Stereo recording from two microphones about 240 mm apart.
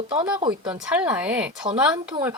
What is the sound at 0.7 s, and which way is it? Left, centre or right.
Speech, centre.